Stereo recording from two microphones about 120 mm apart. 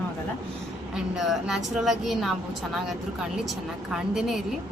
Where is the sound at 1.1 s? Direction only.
5° right (ahead or behind).